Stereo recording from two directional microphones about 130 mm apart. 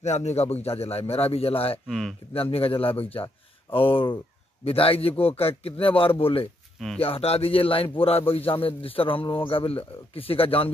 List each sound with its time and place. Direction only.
0.0 s a man's voice: 60° left (ahead or behind)
1.9 s speech: centre (ahead or behind)
2.3 s a man's voice: 50° left (ahead or behind)